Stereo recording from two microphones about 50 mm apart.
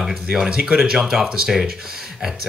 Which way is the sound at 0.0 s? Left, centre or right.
Centre.